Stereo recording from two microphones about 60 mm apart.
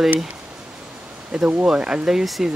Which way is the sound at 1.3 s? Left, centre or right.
Centre.